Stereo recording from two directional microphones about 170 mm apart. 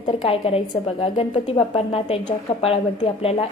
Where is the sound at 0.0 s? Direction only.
35° left (ahead or behind).